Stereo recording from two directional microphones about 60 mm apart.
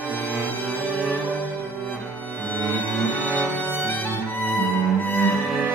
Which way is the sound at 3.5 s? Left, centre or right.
Left.